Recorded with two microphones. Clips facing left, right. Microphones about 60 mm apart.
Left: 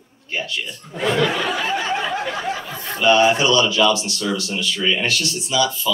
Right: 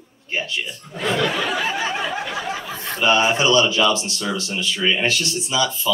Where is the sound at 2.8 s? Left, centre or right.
Right.